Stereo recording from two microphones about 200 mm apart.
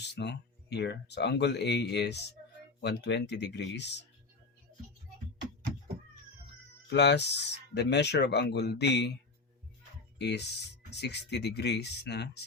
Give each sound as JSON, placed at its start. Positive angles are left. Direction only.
{"t": 0.2, "sound": "speech", "side_deg": 55}
{"t": 6.9, "sound": "speech", "side_deg": 60}
{"t": 10.2, "sound": "speech", "side_deg": 55}